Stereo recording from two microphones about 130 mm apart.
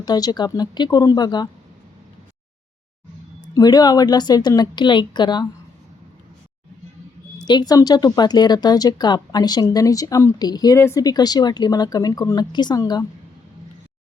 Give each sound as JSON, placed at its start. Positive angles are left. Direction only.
{"t": 0.0, "sound": "speech", "side_deg": 30}
{"t": 3.5, "sound": "speech", "side_deg": 30}
{"t": 7.3, "sound": "speech", "side_deg": 35}